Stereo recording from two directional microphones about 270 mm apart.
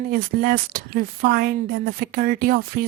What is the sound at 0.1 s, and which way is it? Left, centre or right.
Speech, right.